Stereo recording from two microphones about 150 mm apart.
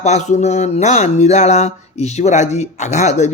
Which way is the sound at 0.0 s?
50° left (ahead or behind).